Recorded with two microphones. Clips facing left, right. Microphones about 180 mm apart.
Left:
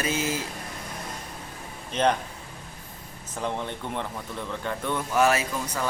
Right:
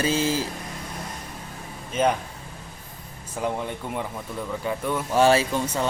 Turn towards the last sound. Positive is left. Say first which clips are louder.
# right 5 dB
turn(degrees=-25)  # may be behind; listen again after turning